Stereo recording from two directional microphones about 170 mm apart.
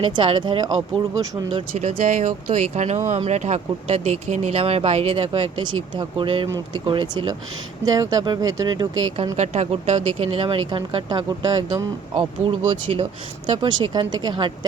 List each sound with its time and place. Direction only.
0.0 s speech: 30° right (ahead or behind)
1.5 s speech: 35° right (ahead or behind)
9.3 s speech: 40° right (ahead or behind); by 14.5 s 25° right (ahead or behind)